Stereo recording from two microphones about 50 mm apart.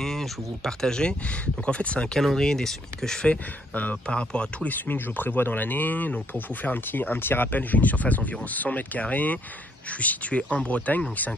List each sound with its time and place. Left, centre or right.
0.0 s speech: centre
2.1 s speech: centre
3.2 s speech: left
4.6 s speech: left